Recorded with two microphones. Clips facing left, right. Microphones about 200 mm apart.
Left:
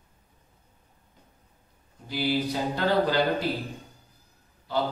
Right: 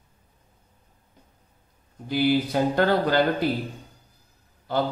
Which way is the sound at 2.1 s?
55° right (ahead or behind).